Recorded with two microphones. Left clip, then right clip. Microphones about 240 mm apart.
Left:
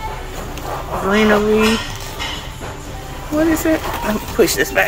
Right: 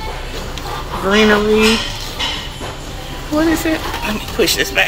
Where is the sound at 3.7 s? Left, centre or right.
Centre.